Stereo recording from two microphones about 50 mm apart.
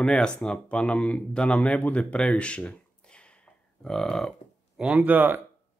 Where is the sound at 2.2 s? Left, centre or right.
Centre.